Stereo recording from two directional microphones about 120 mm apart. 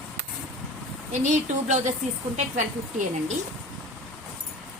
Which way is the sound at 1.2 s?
85° right.